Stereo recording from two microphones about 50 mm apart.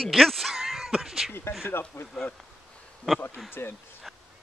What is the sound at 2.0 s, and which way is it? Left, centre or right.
Speech, left.